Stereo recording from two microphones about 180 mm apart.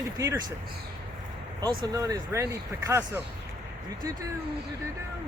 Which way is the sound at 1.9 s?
20° right (ahead or behind).